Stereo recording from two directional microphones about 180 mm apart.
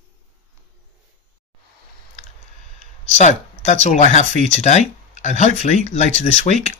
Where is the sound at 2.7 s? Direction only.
40° left (ahead or behind).